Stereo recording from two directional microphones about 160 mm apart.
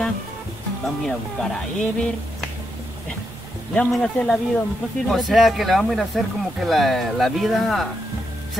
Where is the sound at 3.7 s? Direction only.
5° left (ahead or behind).